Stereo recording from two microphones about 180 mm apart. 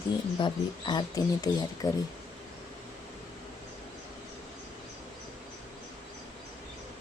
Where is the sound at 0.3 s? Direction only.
25° left (ahead or behind).